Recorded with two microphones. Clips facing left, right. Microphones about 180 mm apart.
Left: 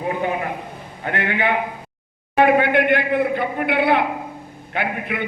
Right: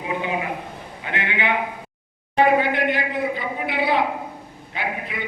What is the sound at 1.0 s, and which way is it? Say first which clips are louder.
A man's voice: left 4 dB; 50° left (ahead or behind).